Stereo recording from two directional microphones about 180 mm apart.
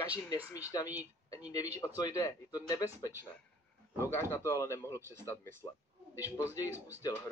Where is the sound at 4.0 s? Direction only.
15° left (ahead or behind).